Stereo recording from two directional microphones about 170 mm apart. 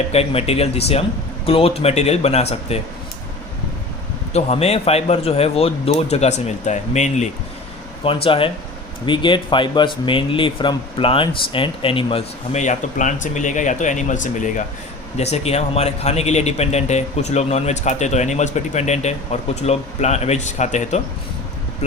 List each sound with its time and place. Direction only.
0.1 s a man's voice: 35° left (ahead or behind)
4.3 s a man's voice: 40° left (ahead or behind)
8.0 s a man's voice: 30° left (ahead or behind)